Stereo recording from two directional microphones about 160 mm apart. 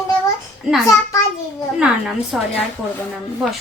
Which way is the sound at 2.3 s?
Centre (ahead or behind).